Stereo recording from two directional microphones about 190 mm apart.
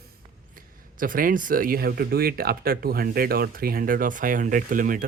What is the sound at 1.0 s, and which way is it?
Speech, 45° right (ahead or behind).